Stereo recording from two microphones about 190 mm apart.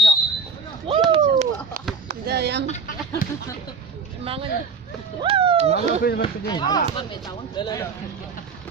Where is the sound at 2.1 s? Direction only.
60° right (ahead or behind).